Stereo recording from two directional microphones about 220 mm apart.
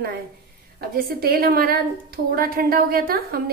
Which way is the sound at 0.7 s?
40° right (ahead or behind).